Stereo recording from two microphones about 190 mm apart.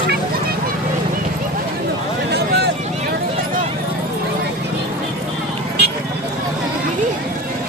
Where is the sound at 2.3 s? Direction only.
60° right (ahead or behind).